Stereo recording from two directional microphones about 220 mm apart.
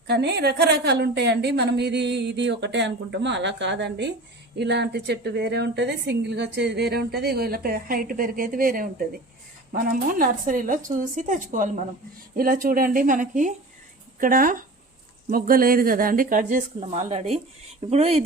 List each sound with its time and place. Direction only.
0.1 s a woman's voice: 50° right (ahead or behind); by 18.2 s 25° right (ahead or behind)